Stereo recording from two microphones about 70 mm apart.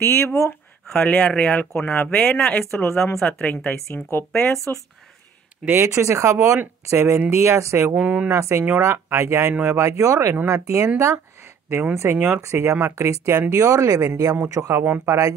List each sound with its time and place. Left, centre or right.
0.0 s speech: left
0.9 s speech: left
2.7 s speech: left
3.3 s speech: centre
3.9 s speech: left
5.7 s speech: right
7.9 s speech: centre
8.3 s speech: right
11.9 s speech: right